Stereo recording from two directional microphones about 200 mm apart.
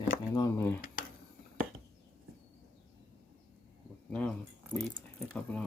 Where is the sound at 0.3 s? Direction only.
15° left (ahead or behind).